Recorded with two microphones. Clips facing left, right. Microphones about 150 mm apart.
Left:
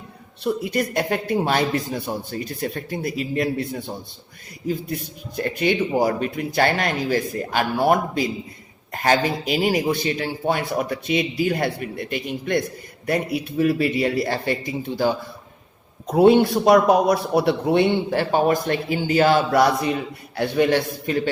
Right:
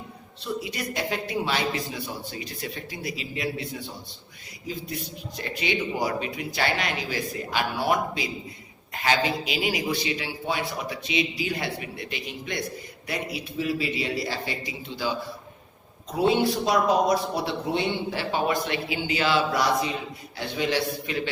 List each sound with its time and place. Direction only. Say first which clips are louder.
0.4 s a man's voice: left 8 dB; 50° left (ahead or behind)